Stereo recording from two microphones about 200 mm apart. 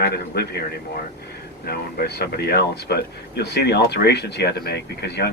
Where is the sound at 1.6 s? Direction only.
50° left (ahead or behind).